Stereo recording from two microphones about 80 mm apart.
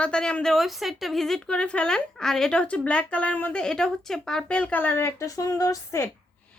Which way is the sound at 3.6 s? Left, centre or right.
Centre.